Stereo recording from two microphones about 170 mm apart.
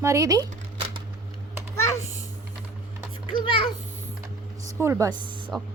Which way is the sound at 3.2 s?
30° left (ahead or behind).